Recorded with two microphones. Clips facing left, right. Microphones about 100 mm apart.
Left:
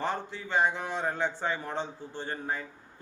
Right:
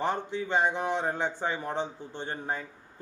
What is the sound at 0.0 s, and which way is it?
A man's voice, 15° right (ahead or behind).